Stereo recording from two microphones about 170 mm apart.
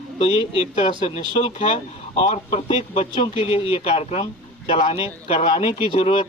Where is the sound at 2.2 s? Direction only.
40° left (ahead or behind).